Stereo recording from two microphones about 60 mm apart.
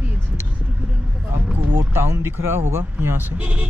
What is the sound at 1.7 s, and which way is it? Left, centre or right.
Speech, right.